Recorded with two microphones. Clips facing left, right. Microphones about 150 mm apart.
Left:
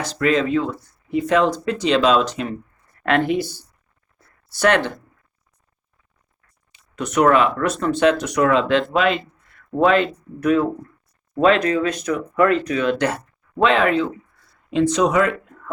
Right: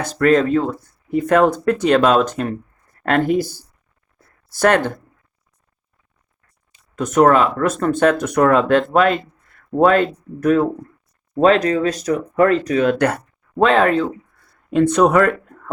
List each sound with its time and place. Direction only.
0.0 s speech: 50° right (ahead or behind)
4.5 s speech: 50° right (ahead or behind)
6.7 s speech: 45° right (ahead or behind)
11.3 s speech: 40° right (ahead or behind)